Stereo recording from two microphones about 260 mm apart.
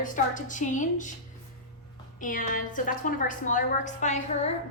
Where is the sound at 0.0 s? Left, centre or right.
Left.